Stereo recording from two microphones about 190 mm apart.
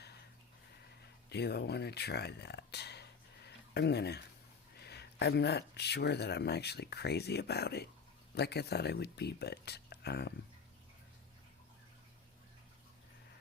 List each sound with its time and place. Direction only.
1.3 s speech: 60° left (ahead or behind)